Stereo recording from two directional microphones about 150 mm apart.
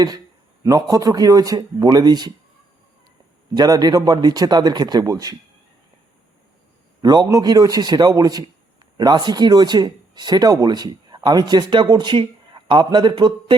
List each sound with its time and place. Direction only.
0.6 s speech: 25° right (ahead or behind)
3.5 s speech: 30° right (ahead or behind)
7.0 s speech: 25° right (ahead or behind)